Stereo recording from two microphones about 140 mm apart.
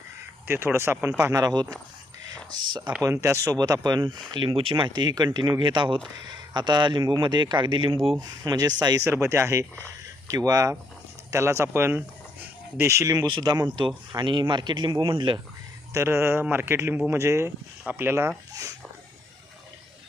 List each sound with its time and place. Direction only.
0.4 s speech: 15° right (ahead or behind)
2.6 s speech: 30° right (ahead or behind)
15.9 s speech: 20° right (ahead or behind)